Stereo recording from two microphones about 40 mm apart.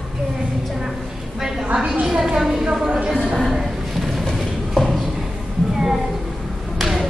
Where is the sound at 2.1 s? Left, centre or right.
Centre.